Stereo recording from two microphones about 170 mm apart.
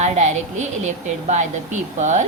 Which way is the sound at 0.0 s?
45° right (ahead or behind).